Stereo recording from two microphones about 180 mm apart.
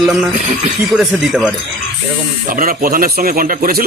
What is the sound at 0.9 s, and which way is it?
Speech, 5° right (ahead or behind).